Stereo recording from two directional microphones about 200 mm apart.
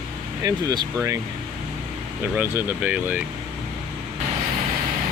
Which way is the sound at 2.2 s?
10° right (ahead or behind).